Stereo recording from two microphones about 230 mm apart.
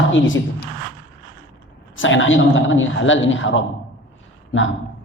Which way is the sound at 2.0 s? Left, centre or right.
Left.